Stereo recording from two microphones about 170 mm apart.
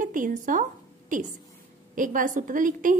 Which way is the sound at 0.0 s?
50° right (ahead or behind).